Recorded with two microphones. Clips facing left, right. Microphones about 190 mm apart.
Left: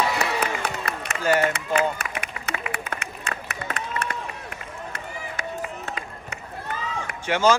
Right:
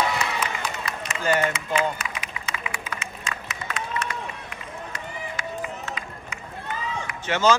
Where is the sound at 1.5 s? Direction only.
65° left (ahead or behind).